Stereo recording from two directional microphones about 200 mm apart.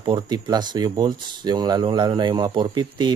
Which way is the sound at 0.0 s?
20° right (ahead or behind).